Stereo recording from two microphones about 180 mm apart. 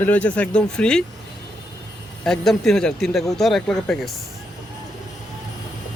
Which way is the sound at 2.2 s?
Centre (ahead or behind).